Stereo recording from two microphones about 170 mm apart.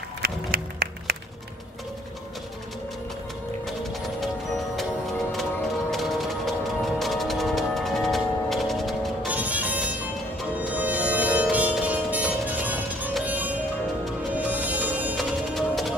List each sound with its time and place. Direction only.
0.2 s music: 65° right (ahead or behind)
5.3 s music: centre (ahead or behind)
15.1 s music: centre (ahead or behind)